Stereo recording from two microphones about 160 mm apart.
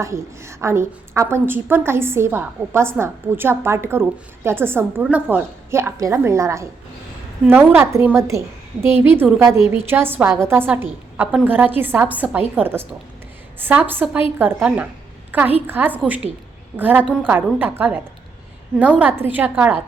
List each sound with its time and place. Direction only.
0.0 s a woman's voice: 15° right (ahead or behind)